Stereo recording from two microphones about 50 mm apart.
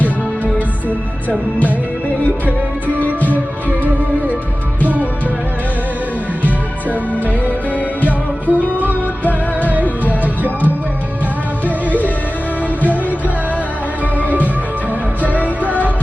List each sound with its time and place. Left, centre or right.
2.8 s music: left
7.8 s music: left
10.0 s music: right
15.2 s music: left